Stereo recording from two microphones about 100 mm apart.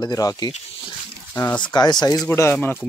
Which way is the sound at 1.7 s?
45° left (ahead or behind).